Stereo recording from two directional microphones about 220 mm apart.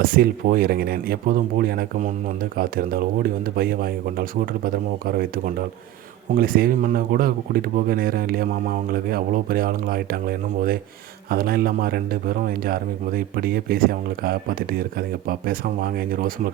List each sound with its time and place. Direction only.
0.0 s speech: 40° right (ahead or behind)